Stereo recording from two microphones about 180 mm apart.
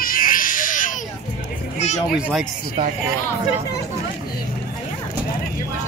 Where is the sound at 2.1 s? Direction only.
5° right (ahead or behind).